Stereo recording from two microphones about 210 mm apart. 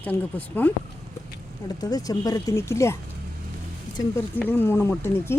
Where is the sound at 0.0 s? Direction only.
10° left (ahead or behind).